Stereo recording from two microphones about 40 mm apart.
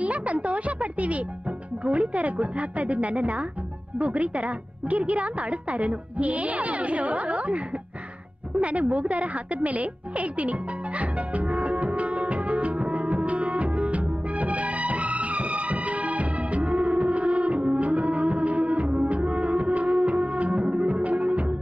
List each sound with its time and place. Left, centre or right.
0.0 s a woman's voice: right
8.5 s music: right